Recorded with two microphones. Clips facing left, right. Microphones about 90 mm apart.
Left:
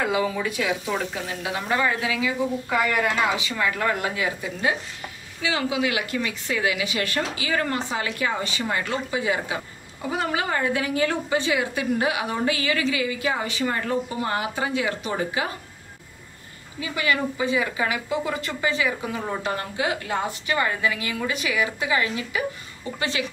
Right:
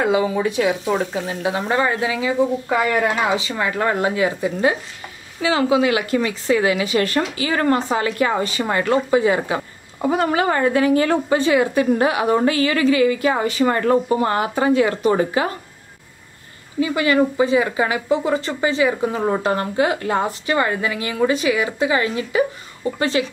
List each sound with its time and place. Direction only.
0.0 s a woman's voice: 30° right (ahead or behind); by 15.5 s 45° right (ahead or behind)
16.9 s a woman's voice: 35° right (ahead or behind)
19.2 s a woman's voice: 45° right (ahead or behind)